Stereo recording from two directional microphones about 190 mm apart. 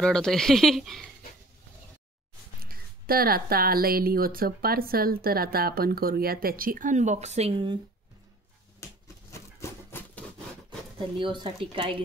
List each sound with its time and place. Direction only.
0.0 s speech: 5° left (ahead or behind)
2.6 s speech: 50° right (ahead or behind); by 7.8 s 25° right (ahead or behind)
8.7 s a sound: 15° left (ahead or behind)
11.0 s speech: 25° right (ahead or behind)